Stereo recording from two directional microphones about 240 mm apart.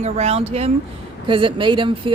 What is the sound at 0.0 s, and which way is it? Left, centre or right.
Speech, right.